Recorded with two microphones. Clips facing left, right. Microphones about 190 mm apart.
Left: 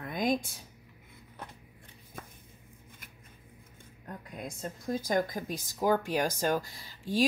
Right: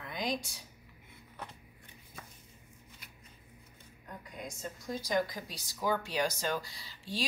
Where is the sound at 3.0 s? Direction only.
50° left (ahead or behind).